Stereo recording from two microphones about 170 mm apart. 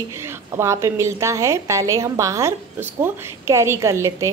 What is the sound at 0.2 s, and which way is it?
A woman's voice, 15° right (ahead or behind).